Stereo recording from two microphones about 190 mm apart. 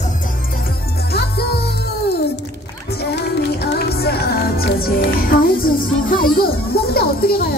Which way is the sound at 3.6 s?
55° left (ahead or behind).